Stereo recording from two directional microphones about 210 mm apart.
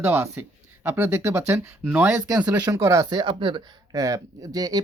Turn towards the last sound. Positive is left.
turn(degrees=-20)  # may be behind; listen again after turning